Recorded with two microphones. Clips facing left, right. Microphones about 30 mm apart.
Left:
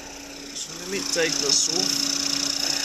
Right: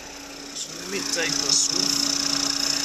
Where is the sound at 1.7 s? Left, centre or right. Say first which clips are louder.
Even; centre.